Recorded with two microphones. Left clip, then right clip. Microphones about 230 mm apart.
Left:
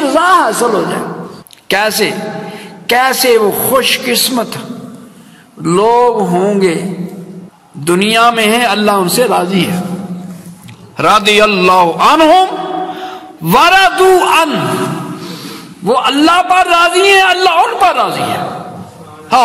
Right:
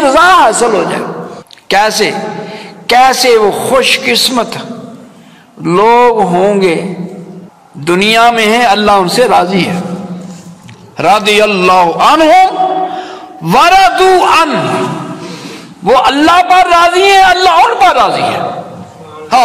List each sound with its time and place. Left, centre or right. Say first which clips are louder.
0.0 s a sound: right 4 dB; left
1.7 s a man's voice: right 3 dB; left
7.8 s a man's voice: right 2 dB; left
11.0 s a man's voice: right 1 dB; left
15.8 s a man's voice: right 3 dB; left